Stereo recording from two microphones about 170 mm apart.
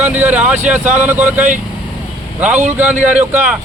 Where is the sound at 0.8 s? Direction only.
45° right (ahead or behind).